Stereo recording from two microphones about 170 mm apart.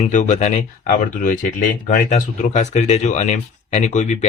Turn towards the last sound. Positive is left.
turn(degrees=45)  # may be behind; listen again after turning